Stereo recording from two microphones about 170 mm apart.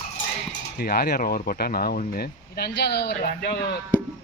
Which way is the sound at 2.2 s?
70° left (ahead or behind).